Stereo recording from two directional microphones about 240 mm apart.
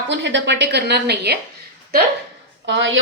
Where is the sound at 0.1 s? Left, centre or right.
Right.